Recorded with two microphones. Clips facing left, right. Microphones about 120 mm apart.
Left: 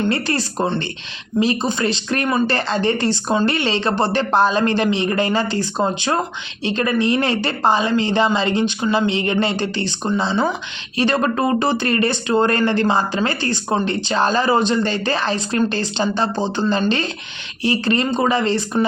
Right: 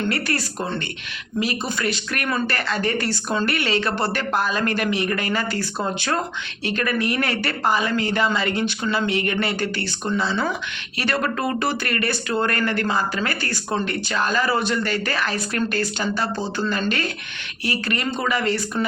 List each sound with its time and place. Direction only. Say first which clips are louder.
0.0 s speech: left 4 dB; 25° left (ahead or behind)